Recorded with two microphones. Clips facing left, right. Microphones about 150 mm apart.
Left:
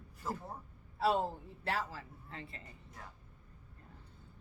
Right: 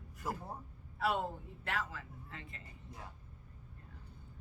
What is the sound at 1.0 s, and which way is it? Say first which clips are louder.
A woman's voice: left 3 dB; 30° left (ahead or behind).